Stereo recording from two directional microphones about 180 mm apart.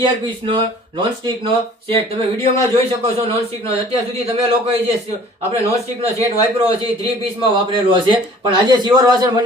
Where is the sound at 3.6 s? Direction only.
30° right (ahead or behind).